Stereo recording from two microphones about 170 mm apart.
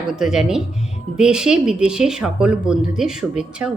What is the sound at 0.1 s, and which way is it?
Speech, 5° right (ahead or behind).